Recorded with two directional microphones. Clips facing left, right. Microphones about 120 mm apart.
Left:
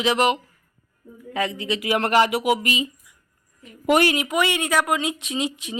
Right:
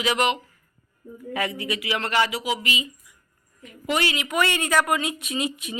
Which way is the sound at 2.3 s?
60° left (ahead or behind).